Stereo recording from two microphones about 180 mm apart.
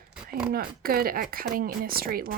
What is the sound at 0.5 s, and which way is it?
Speech, 55° right (ahead or behind).